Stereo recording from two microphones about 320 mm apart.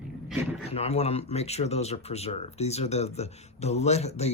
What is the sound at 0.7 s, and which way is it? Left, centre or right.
Speech, centre.